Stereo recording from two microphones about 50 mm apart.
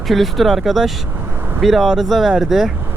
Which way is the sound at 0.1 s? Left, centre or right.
Centre.